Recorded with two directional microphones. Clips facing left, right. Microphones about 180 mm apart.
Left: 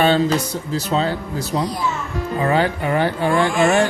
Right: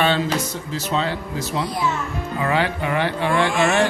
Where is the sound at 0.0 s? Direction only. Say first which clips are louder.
Left 4 dB; 40° left (ahead or behind).